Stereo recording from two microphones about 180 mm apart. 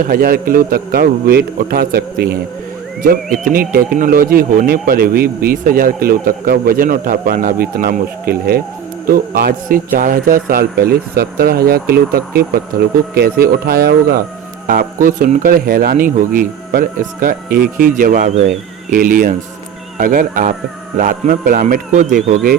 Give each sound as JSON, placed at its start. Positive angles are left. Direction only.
{"t": 0.1, "sound": "a man's voice", "side_deg": -55}